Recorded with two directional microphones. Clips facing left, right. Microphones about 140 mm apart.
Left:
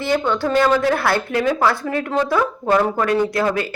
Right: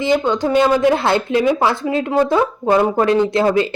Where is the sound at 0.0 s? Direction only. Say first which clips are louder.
Right 3 dB; 15° right (ahead or behind).